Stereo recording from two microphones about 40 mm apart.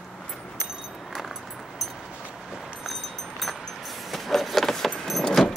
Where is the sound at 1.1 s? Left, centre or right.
Centre.